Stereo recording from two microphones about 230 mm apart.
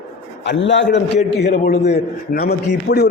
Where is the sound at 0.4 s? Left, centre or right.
Left.